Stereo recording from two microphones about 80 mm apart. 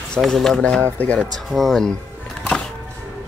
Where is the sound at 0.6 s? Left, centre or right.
Centre.